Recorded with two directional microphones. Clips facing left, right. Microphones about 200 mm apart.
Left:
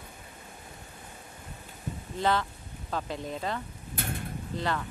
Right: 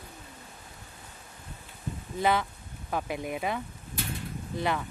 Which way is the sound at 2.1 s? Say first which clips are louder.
Right 1 dB; 10° right (ahead or behind).